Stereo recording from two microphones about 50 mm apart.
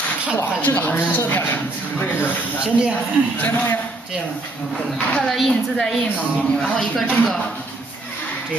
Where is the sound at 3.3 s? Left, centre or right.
Left.